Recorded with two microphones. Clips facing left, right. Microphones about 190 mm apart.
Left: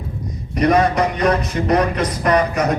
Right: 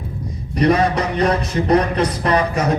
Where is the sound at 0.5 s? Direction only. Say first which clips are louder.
Even; 30° right (ahead or behind).